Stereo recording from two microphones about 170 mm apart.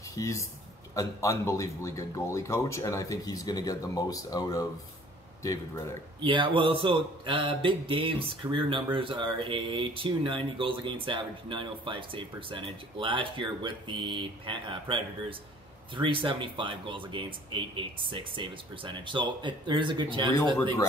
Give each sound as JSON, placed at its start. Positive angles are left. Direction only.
{"t": 0.1, "sound": "speech", "side_deg": 20}
{"t": 6.2, "sound": "speech", "side_deg": -30}